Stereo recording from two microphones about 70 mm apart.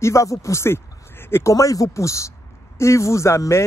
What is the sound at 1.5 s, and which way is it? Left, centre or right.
A man's voice, left.